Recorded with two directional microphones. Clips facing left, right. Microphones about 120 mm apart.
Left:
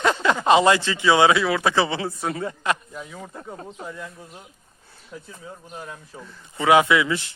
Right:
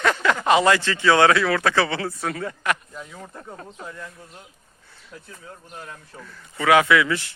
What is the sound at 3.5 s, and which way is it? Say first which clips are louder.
Speech: left 2 dB; 25° left (ahead or behind).